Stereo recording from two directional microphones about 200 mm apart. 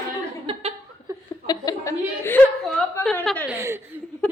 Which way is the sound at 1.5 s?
15° left (ahead or behind).